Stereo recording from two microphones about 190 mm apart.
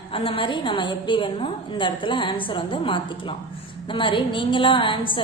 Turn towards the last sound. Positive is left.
turn(degrees=25)  # may be behind; listen again after turning